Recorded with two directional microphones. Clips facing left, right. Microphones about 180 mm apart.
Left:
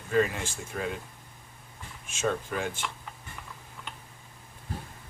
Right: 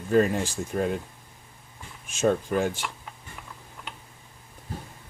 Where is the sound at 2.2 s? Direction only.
40° right (ahead or behind).